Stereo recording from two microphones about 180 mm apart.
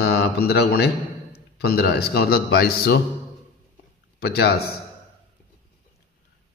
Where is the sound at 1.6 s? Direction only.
65° left (ahead or behind).